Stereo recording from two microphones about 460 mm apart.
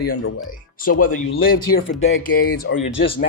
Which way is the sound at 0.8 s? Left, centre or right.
Centre.